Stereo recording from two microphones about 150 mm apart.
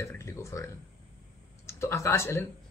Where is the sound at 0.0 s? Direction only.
20° left (ahead or behind).